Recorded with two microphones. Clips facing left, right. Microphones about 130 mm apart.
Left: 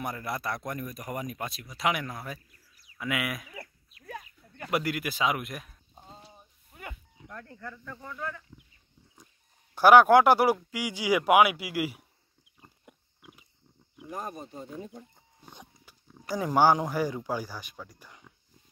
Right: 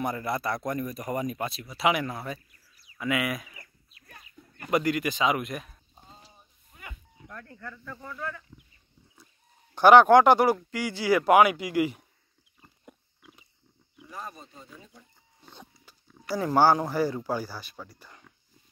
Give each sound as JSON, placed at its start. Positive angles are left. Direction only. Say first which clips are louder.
{"t": 0.0, "sound": "speech", "louder": "right 4 dB", "side_deg": 0}
{"t": 4.6, "sound": "speech", "louder": "right 4 dB", "side_deg": 5}
{"t": 7.2, "sound": "speech", "louder": "even", "side_deg": 20}
{"t": 9.2, "sound": "goat", "louder": "left 1 dB", "side_deg": 15}
{"t": 9.8, "sound": "speech", "louder": "right 2 dB", "side_deg": 5}
{"t": 12.5, "sound": "pig", "louder": "right 2 dB", "side_deg": 10}
{"t": 14.0, "sound": "speech", "louder": "left 4 dB", "side_deg": 50}
{"t": 15.4, "sound": "a sound", "louder": "even", "side_deg": 15}
{"t": 16.3, "sound": "speech", "louder": "right 1 dB", "side_deg": 15}